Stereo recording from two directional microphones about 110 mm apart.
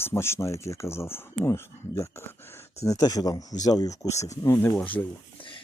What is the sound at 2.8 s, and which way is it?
Speech, 30° left (ahead or behind).